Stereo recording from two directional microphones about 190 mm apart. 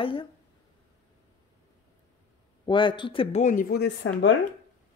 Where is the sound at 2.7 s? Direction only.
25° left (ahead or behind).